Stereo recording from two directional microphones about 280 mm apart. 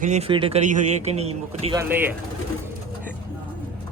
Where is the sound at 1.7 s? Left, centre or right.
Centre.